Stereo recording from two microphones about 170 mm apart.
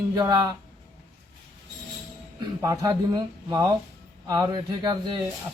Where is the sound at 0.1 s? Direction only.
25° right (ahead or behind).